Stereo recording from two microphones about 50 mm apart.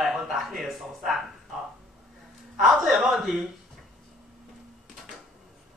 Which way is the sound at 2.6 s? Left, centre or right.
Centre.